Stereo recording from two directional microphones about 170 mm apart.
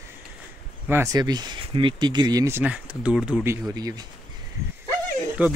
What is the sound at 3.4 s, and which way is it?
Speech, 15° right (ahead or behind).